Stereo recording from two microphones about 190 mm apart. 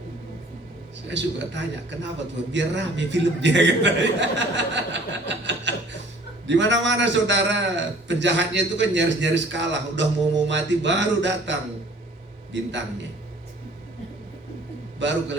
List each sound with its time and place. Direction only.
1.0 s a man's voice: 70° right (ahead or behind)
12.5 s a man's voice: 70° right (ahead or behind)
14.9 s a man's voice: 70° right (ahead or behind)